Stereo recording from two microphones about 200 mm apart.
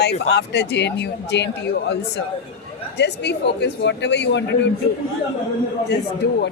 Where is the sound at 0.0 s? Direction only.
55° left (ahead or behind).